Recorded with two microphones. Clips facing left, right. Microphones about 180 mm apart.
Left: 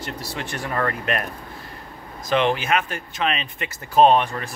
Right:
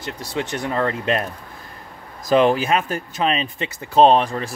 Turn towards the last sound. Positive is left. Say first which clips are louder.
# right 2 dB
turn(degrees=-30)  # may be behind; listen again after turning